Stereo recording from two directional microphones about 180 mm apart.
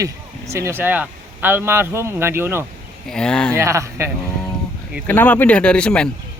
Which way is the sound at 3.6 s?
15° right (ahead or behind).